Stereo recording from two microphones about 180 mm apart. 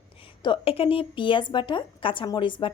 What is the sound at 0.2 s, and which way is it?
Speech, 30° left (ahead or behind).